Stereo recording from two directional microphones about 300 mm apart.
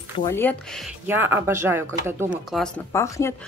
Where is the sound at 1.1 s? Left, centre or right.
Centre.